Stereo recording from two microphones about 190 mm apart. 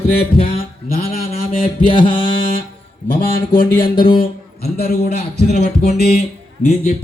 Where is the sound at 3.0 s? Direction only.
50° left (ahead or behind).